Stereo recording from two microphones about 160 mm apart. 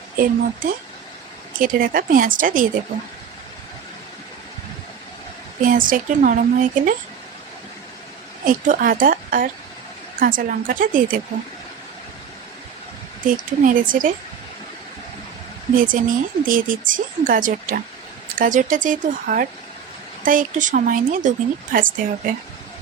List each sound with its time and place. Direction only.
1.5 s speech: 60° right (ahead or behind)
5.6 s speech: 55° right (ahead or behind)
8.4 s speech: 55° right (ahead or behind)
13.2 s speech: 55° right (ahead or behind)
15.7 s speech: 60° right (ahead or behind)